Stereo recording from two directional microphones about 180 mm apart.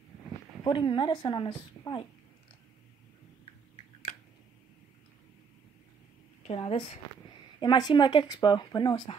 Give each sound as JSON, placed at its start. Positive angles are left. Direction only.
{"t": 0.7, "sound": "speech", "side_deg": 25}
{"t": 6.4, "sound": "a woman's voice", "side_deg": 35}
{"t": 7.6, "sound": "speech", "side_deg": 25}